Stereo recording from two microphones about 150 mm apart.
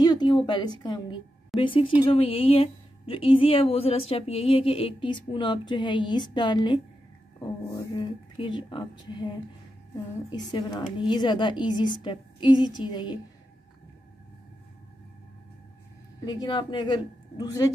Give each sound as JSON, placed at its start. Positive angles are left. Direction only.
{"t": 0.0, "sound": "a woman's voice", "side_deg": 30}
{"t": 10.3, "sound": "a woman's voice", "side_deg": 25}
{"t": 16.3, "sound": "a woman's voice", "side_deg": 30}